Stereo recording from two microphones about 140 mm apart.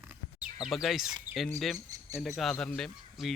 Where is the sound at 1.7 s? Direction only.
25° right (ahead or behind).